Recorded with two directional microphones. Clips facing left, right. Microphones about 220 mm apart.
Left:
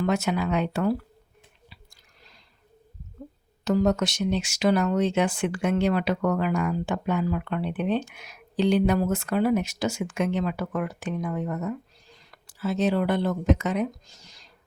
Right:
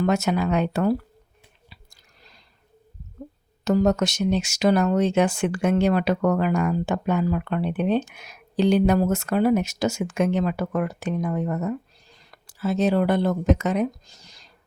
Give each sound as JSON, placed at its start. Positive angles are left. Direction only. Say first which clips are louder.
{"t": 0.0, "sound": "speech", "louder": "right 3 dB", "side_deg": -45}
{"t": 3.6, "sound": "speech", "louder": "right 2 dB", "side_deg": -40}